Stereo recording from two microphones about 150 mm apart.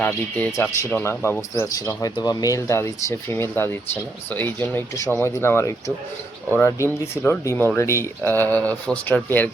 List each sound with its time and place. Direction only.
0.0 s speech: 10° left (ahead or behind)